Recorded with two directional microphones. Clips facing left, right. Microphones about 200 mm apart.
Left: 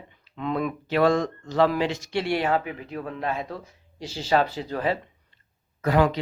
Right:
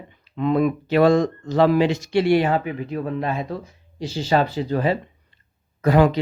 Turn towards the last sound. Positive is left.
turn(degrees=-20)  # may be behind; listen again after turning